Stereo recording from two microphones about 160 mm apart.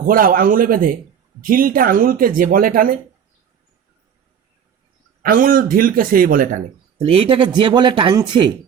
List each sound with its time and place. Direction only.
0.0 s speech: 65° right (ahead or behind)
5.2 s speech: 60° right (ahead or behind)
7.0 s speech: 35° right (ahead or behind)